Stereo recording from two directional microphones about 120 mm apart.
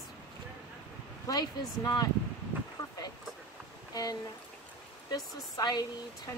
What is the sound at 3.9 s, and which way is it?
Speech, 30° left (ahead or behind).